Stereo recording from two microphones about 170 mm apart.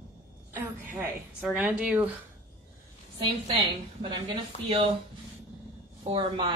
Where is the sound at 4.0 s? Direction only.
35° right (ahead or behind).